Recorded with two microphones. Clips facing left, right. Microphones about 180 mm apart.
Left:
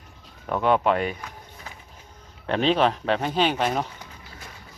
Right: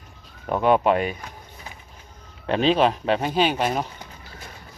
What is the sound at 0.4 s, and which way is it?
Speech, 15° right (ahead or behind).